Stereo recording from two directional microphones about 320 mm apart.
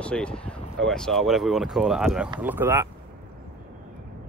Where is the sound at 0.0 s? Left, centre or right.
Centre.